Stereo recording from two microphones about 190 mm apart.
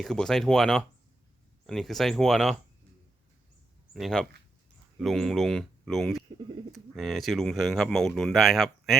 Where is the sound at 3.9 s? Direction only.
Centre (ahead or behind).